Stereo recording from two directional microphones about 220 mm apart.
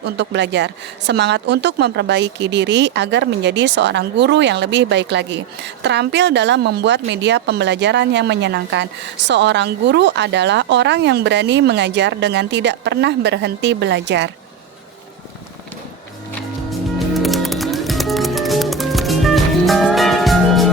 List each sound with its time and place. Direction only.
0.0 s speech: 50° right (ahead or behind)
17.2 s music: centre (ahead or behind)